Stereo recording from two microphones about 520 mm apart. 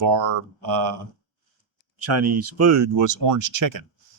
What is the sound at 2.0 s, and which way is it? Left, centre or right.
Speech, right.